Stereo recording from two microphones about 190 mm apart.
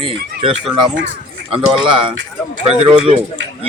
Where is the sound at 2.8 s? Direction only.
30° right (ahead or behind).